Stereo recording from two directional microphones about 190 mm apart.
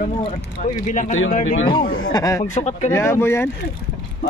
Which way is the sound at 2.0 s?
20° left (ahead or behind).